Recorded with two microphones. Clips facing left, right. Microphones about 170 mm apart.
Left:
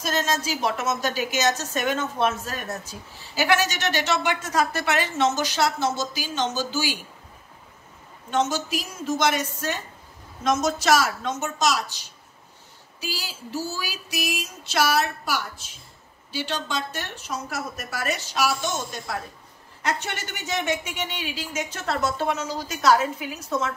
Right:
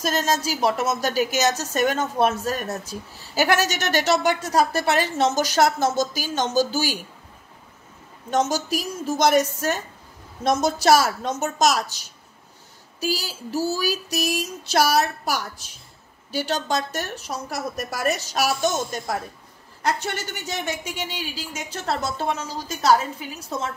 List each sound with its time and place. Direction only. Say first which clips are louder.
0.2 s a woman's voice: right 3 dB; 40° right (ahead or behind)
8.3 s a woman's voice: right 2 dB; 40° right (ahead or behind)